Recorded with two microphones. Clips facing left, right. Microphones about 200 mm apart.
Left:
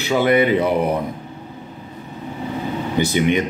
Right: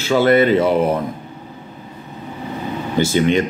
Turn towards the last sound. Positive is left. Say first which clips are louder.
# right 2 dB
turn(degrees=15)  # may be behind; listen again after turning